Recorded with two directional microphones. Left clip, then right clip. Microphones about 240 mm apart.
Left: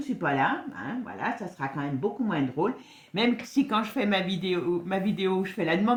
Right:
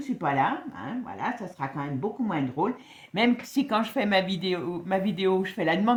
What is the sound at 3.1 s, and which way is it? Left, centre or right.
Speech, right.